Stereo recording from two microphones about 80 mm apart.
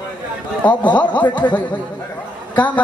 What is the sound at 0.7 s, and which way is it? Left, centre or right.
Speech, centre.